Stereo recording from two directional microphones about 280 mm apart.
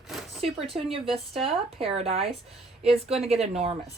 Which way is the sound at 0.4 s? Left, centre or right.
Right.